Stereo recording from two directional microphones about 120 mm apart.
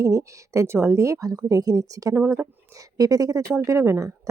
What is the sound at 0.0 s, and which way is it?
Speech, 25° right (ahead or behind).